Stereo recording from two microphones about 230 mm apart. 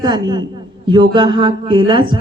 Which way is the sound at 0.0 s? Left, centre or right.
Centre.